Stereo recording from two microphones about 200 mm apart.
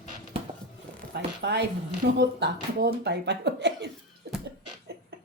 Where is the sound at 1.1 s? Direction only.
55° right (ahead or behind).